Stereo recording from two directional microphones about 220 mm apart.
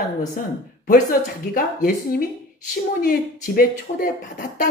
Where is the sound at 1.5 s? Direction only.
40° left (ahead or behind).